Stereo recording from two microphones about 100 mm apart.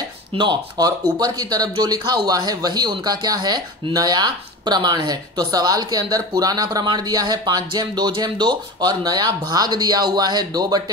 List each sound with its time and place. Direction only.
0.3 s speech: 55° right (ahead or behind)